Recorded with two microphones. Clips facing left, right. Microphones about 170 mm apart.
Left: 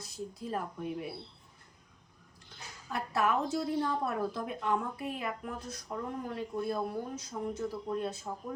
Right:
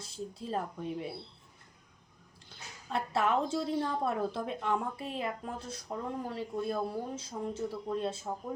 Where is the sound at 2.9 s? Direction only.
25° right (ahead or behind).